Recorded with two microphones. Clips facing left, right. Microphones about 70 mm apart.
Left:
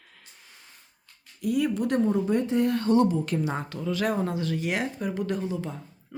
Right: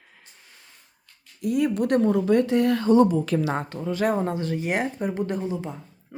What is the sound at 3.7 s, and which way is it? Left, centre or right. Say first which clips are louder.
Speech: right 3 dB; right.